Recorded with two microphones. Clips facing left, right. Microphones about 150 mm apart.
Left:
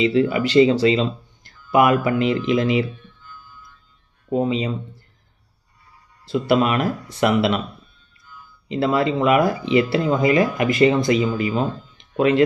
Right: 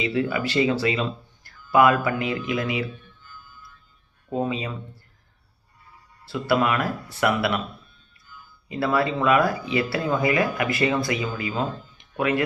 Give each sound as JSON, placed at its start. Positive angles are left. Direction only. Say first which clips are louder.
{"t": 0.0, "sound": "speech", "louder": "left 6 dB", "side_deg": 25}
{"t": 1.5, "sound": "a sound", "louder": "left 2 dB", "side_deg": 20}
{"t": 2.0, "sound": "speech", "louder": "left 6 dB", "side_deg": 25}
{"t": 4.3, "sound": "speech", "louder": "left 5 dB", "side_deg": 20}
{"t": 6.2, "sound": "speech", "louder": "left 4 dB", "side_deg": 20}
{"t": 8.7, "sound": "speech", "louder": "left 4 dB", "side_deg": 20}